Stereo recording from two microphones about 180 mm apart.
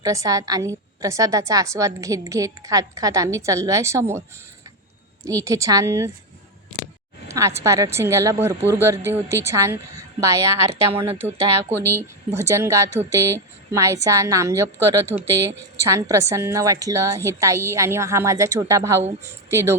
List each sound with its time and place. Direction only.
0.0 s a woman's voice: 20° right (ahead or behind)
5.2 s a woman's voice: 20° right (ahead or behind)
7.3 s a woman's voice: 15° right (ahead or behind)
12.3 s a woman's voice: 15° right (ahead or behind)